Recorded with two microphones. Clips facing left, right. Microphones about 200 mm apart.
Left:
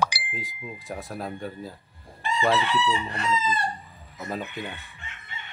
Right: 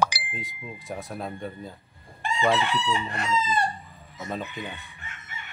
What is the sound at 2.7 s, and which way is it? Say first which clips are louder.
Chicken: left 2 dB; 50° right (ahead or behind).